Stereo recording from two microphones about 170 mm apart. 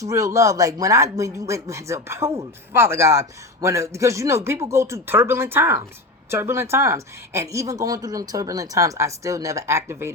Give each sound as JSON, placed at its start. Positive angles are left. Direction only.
{"t": 0.0, "sound": "speech", "side_deg": -20}